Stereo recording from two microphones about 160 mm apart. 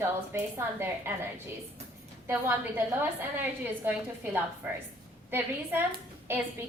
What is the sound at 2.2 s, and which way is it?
A woman's voice, 15° right (ahead or behind).